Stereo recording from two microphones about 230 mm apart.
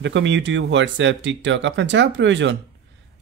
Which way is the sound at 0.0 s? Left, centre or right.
Right.